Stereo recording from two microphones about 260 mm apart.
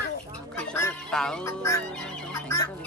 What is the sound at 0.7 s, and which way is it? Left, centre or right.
Music, centre.